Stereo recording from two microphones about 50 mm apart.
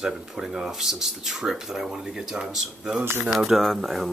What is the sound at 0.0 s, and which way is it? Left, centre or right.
Speech, centre.